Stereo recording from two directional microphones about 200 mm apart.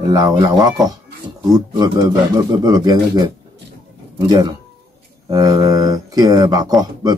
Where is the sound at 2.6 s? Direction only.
20° right (ahead or behind).